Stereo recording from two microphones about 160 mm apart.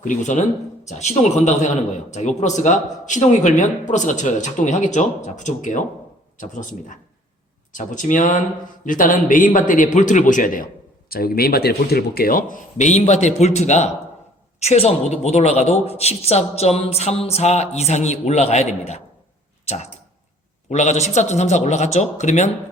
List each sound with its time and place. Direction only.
0.0 s a man's voice: 50° left (ahead or behind)
11.1 s a man's voice: 70° left (ahead or behind); by 22.4 s 50° left (ahead or behind)